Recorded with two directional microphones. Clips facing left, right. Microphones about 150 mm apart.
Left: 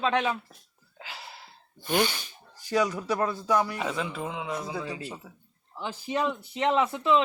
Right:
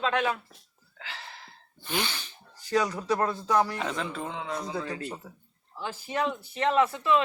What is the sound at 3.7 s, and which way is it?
Speech, 5° left (ahead or behind).